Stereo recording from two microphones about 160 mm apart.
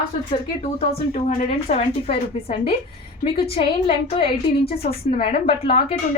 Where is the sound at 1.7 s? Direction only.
40° left (ahead or behind).